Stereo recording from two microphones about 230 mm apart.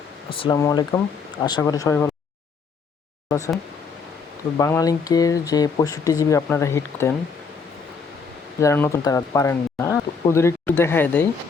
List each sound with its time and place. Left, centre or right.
0.3 s speech: left
3.2 s a sound: centre
4.5 s speech: centre
8.6 s speech: centre